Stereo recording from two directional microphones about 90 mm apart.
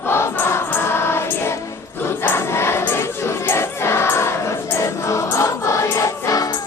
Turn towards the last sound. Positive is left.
turn(degrees=40)  # may be behind; listen again after turning